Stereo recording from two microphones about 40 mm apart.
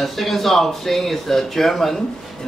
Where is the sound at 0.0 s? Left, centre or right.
Centre.